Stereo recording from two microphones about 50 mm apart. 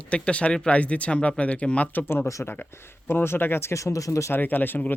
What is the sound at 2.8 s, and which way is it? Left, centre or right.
Speech, left.